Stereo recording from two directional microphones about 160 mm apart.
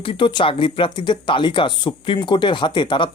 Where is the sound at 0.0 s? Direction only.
30° left (ahead or behind).